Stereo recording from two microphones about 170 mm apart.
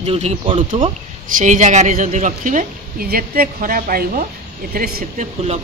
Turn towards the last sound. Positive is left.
turn(degrees=-60)  # may be behind; listen again after turning